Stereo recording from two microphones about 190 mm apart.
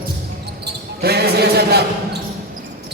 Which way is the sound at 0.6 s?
55° right (ahead or behind).